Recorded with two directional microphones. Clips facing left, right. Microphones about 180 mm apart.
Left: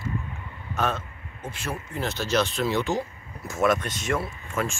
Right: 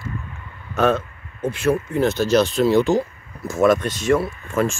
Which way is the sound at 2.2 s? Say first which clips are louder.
Right 5 dB; 35° right (ahead or behind).